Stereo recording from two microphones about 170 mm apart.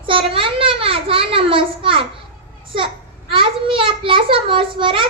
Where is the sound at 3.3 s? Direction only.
30° right (ahead or behind).